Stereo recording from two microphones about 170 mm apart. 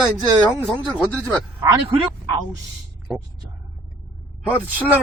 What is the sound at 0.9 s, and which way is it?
Speech, 5° left (ahead or behind).